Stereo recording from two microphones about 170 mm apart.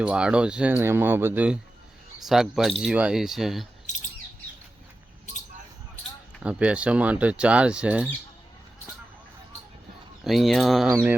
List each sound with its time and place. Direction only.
0.0 s speech: 5° right (ahead or behind)
3.9 s bird: 45° left (ahead or behind)
6.4 s speech: 5° right (ahead or behind)
10.2 s speech: centre (ahead or behind)